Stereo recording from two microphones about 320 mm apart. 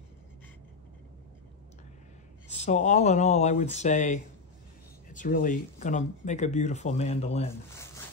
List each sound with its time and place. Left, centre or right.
2.5 s speech: left